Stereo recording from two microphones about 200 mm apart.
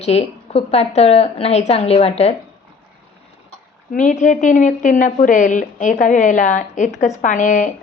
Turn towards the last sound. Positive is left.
turn(degrees=40)  # may be behind; listen again after turning